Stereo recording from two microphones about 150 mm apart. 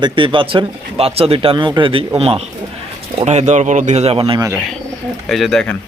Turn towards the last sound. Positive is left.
turn(degrees=5)  # may be behind; listen again after turning